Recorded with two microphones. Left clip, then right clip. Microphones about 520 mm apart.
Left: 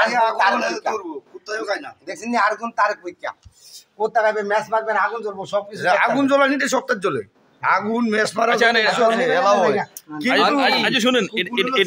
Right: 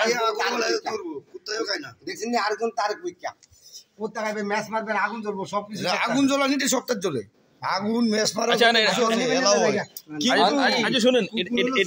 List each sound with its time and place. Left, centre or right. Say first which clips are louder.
0.0 s a man's voice: left 6 dB; right
2.0 s a man's voice: left 6 dB; right
4.5 s a man's voice: left 6 dB; right